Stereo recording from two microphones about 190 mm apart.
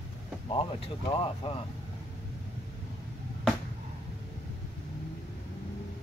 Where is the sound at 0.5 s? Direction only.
30° left (ahead or behind).